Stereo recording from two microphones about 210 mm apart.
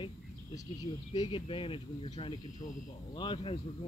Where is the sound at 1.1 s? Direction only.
20° left (ahead or behind).